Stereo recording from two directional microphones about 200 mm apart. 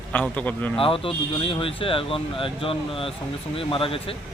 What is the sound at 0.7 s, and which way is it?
Speech, 25° left (ahead or behind).